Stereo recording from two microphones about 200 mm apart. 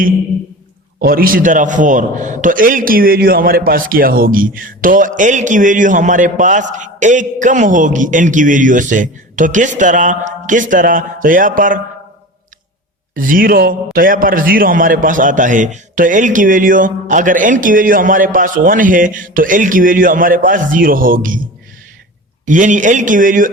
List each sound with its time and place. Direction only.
0.9 s a man's voice: 45° right (ahead or behind)
13.1 s a man's voice: 45° right (ahead or behind)
22.4 s a man's voice: 40° right (ahead or behind)